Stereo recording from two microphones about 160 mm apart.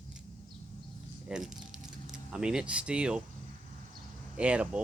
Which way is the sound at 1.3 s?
5° right (ahead or behind).